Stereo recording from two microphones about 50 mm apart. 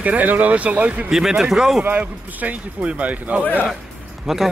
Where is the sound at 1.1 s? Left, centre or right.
Centre.